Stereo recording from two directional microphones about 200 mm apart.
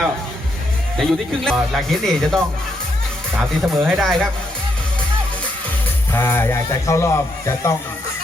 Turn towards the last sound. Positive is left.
turn(degrees=15)  # may be behind; listen again after turning